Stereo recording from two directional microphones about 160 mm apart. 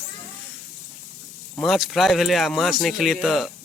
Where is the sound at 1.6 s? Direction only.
Centre (ahead or behind).